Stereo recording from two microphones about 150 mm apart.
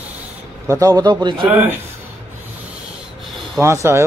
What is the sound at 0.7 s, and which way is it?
Speech, 20° right (ahead or behind).